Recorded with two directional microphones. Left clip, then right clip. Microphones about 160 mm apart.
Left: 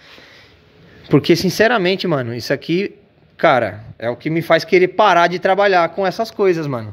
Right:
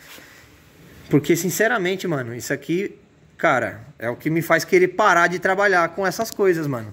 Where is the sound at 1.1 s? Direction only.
25° left (ahead or behind).